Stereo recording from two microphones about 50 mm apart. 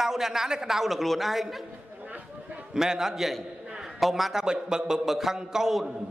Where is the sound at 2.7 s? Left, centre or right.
Centre.